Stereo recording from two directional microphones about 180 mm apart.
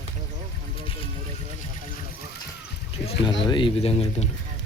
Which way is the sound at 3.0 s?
25° left (ahead or behind).